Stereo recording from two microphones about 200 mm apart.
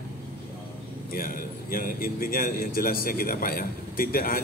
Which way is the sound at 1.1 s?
45° left (ahead or behind).